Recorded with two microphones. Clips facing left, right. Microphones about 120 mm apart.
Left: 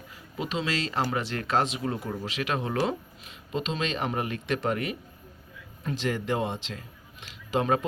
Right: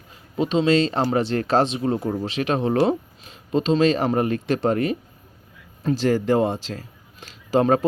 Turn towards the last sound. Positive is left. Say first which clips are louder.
# right 7 dB
turn(degrees=-40)  # may be behind; listen again after turning